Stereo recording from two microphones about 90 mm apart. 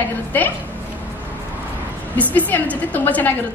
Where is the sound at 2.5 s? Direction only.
20° left (ahead or behind).